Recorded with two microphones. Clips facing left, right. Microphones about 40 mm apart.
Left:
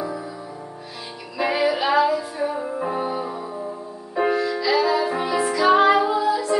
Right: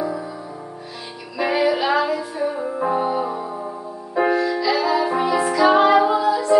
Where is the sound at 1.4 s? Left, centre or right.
Centre.